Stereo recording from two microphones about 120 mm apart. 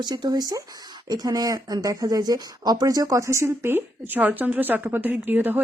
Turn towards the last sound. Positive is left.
turn(degrees=-15)  # may be behind; listen again after turning